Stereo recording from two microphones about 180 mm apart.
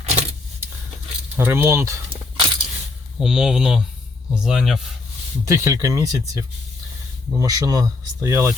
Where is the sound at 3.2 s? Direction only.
Centre (ahead or behind).